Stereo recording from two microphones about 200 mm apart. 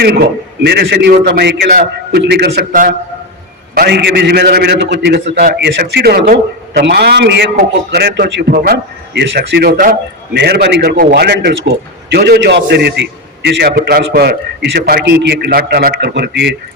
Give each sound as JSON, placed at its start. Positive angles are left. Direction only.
{"t": 0.6, "sound": "a man's voice", "side_deg": -55}